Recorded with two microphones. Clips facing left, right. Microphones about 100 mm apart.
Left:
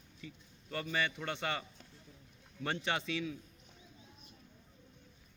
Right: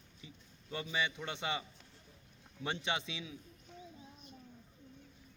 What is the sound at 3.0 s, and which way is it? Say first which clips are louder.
Speech: left 7 dB; 20° right (ahead or behind).